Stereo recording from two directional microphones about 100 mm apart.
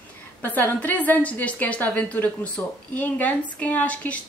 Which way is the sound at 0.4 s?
20° left (ahead or behind).